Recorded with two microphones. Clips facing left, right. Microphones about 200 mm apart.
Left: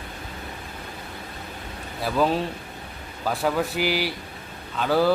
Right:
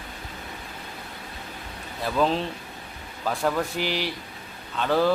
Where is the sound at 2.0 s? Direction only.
10° left (ahead or behind).